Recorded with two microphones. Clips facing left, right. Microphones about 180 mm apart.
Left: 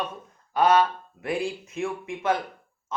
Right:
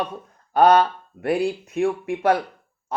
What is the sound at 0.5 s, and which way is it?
Speech, 55° right (ahead or behind).